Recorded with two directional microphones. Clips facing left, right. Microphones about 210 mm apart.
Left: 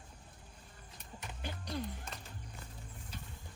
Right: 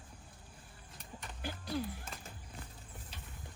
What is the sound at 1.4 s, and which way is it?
Music, 5° right (ahead or behind).